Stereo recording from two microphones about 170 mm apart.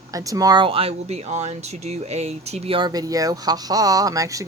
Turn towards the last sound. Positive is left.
turn(degrees=-20)  # may be behind; listen again after turning